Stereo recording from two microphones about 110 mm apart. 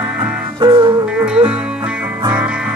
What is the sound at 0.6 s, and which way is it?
Music, 50° right (ahead or behind).